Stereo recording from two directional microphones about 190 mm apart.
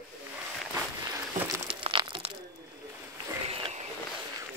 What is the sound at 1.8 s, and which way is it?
Crumpling, 25° right (ahead or behind).